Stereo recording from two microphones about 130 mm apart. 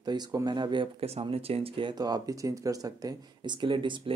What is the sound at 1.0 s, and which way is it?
Speech, 50° right (ahead or behind).